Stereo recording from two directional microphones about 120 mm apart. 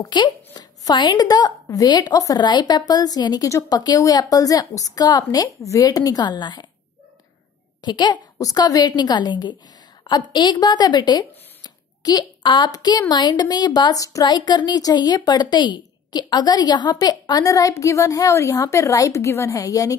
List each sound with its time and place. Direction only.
0.0 s speech: 35° left (ahead or behind)
7.8 s a woman's voice: 40° left (ahead or behind)